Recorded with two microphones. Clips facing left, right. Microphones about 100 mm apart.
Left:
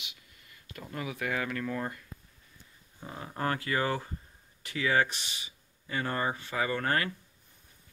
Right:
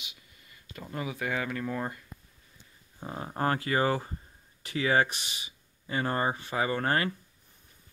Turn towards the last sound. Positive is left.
turn(degrees=-25)  # may be behind; listen again after turning